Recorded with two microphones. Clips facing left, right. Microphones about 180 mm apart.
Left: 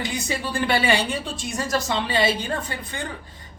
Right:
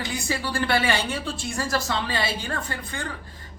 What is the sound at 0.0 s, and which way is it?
A woman's voice, 20° left (ahead or behind).